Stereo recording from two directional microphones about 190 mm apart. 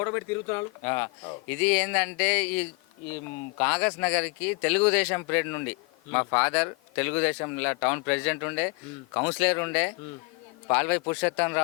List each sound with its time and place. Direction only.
0.0 s speech: 15° left (ahead or behind)